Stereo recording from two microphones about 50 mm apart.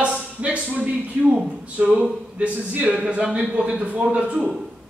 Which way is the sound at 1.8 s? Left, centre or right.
Centre.